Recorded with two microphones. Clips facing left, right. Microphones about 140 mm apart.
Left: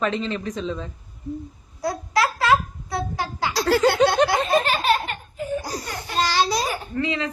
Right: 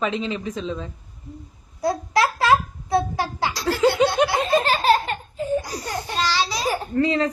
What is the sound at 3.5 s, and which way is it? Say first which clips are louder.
Laughter: left 4 dB; 80° left.